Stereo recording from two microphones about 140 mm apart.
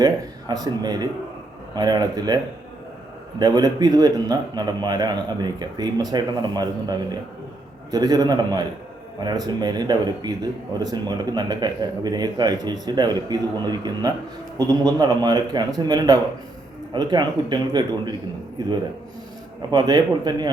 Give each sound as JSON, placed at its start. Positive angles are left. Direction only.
{"t": 0.0, "sound": "a man's voice", "side_deg": -25}